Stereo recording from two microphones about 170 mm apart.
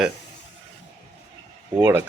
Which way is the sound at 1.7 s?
15° right (ahead or behind).